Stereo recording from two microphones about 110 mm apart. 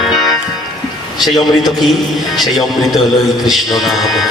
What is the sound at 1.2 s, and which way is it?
Music, centre (ahead or behind).